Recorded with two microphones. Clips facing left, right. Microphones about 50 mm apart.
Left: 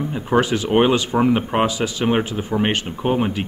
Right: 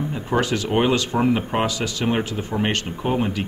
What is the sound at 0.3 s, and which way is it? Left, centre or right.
Speech, centre.